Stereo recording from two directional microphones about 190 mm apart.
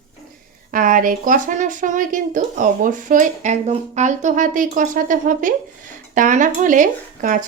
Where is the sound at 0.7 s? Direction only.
45° right (ahead or behind).